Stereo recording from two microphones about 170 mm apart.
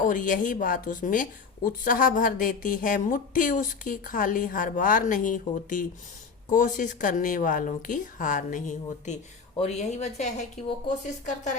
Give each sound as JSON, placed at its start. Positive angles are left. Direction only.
{"t": 0.0, "sound": "speech", "side_deg": 50}